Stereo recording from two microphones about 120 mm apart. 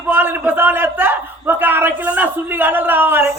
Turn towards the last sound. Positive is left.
turn(degrees=-15)  # may be behind; listen again after turning